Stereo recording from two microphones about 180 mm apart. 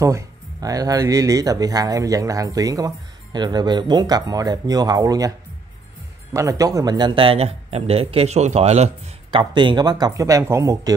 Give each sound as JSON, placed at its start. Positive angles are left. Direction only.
{"t": 0.0, "sound": "speech", "side_deg": -20}
{"t": 6.3, "sound": "speech", "side_deg": -20}
{"t": 9.4, "sound": "speech", "side_deg": -25}